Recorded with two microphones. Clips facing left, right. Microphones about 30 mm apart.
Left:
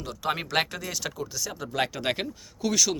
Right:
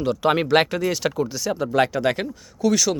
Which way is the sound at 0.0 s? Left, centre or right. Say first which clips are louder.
Right 10 dB; right.